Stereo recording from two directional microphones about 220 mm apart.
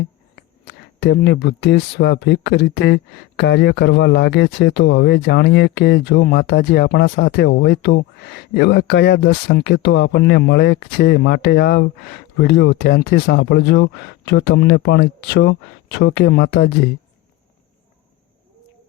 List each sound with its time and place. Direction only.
0.3 s speech: 50° left (ahead or behind)